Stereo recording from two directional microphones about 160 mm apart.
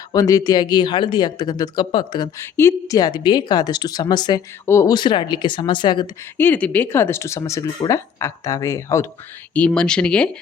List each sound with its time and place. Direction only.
0.1 s speech: 25° left (ahead or behind)
2.4 s speech: 15° left (ahead or behind)
6.3 s speech: 10° left (ahead or behind)
9.6 s speech: 5° left (ahead or behind)